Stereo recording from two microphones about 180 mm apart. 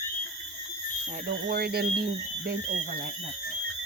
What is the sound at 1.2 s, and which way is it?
Speech, 55° right (ahead or behind).